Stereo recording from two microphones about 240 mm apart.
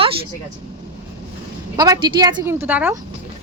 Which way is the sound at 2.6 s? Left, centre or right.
Centre.